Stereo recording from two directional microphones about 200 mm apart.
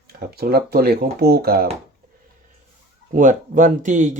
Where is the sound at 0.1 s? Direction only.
50° right (ahead or behind).